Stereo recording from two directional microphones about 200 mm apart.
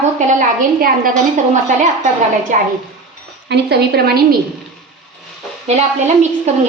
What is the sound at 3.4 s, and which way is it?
Speech, 55° right (ahead or behind).